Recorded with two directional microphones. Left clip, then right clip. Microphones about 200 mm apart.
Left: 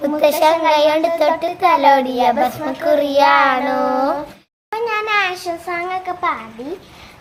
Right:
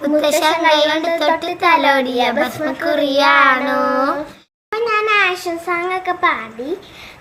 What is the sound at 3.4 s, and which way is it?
Child singing, 20° left (ahead or behind).